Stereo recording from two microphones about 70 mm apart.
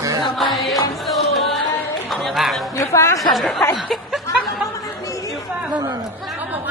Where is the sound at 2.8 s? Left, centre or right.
Left.